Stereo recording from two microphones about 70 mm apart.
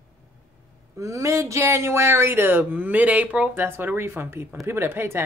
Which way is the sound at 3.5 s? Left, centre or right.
Right.